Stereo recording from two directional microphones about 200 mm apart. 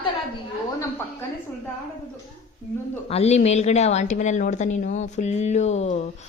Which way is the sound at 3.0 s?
30° left (ahead or behind).